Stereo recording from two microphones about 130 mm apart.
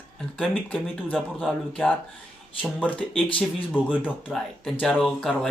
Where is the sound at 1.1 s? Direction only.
Centre (ahead or behind).